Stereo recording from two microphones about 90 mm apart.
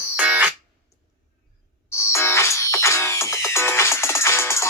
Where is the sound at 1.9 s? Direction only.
30° left (ahead or behind).